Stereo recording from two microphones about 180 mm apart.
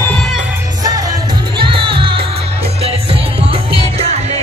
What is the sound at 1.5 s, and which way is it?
Music, 30° right (ahead or behind).